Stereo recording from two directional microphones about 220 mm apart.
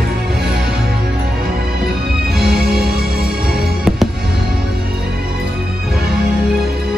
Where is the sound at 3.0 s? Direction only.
45° right (ahead or behind).